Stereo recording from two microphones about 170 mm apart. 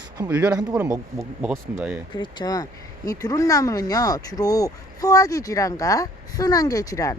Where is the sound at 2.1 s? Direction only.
25° left (ahead or behind).